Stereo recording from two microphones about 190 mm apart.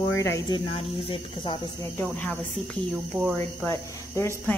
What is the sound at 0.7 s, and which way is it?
Speech, 30° left (ahead or behind).